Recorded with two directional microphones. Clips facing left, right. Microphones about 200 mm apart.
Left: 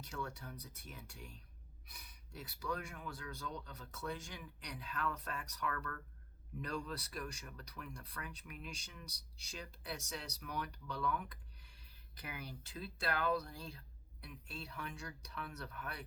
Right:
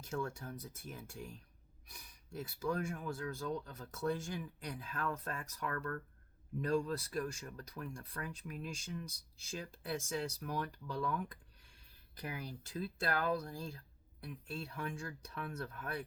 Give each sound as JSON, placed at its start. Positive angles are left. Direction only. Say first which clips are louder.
{"t": 0.0, "sound": "speech", "louder": "right 5 dB", "side_deg": -45}
{"t": 12.1, "sound": "speech", "louder": "right 4 dB", "side_deg": -40}